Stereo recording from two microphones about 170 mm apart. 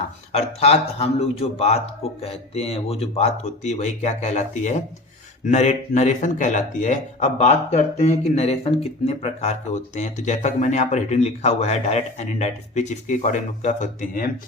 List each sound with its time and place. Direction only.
0.3 s a man's voice: 40° left (ahead or behind)